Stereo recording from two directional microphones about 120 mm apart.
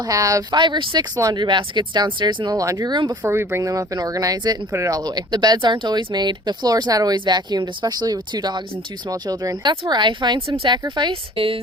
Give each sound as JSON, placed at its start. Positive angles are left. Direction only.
{"t": 0.0, "sound": "speech", "side_deg": -30}
{"t": 3.2, "sound": "speech", "side_deg": -20}